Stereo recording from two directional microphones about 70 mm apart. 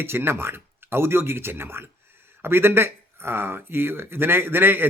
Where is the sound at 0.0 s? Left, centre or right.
Right.